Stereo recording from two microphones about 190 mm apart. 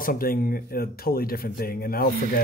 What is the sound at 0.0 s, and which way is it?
Speech, 50° left (ahead or behind).